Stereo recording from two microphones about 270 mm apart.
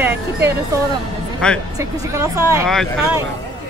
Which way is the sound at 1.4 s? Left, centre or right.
Centre.